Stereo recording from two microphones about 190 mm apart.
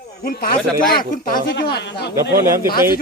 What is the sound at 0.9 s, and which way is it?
Speech, 50° left (ahead or behind).